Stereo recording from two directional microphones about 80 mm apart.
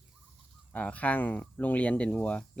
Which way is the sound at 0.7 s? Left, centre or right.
Centre.